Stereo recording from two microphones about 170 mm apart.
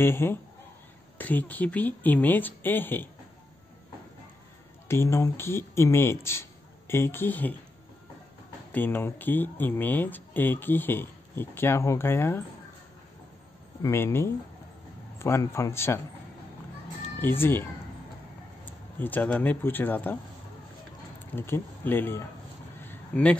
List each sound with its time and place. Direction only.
0.0 s speech: 15° left (ahead or behind)
4.8 s speech: 15° left (ahead or behind)
8.7 s speech: 10° left (ahead or behind)
13.8 s speech: 15° left (ahead or behind)
17.2 s speech: 15° left (ahead or behind)
18.9 s speech: 10° left (ahead or behind)
21.4 s speech: 15° left (ahead or behind)
22.8 s a sound: 10° left (ahead or behind)